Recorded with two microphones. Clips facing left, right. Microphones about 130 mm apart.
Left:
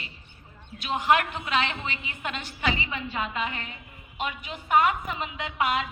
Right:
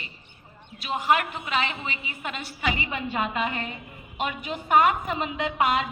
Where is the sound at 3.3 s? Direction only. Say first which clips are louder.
Right 4 dB; 50° right (ahead or behind).